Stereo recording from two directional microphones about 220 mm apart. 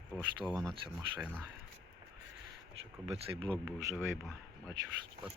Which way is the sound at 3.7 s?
15° right (ahead or behind).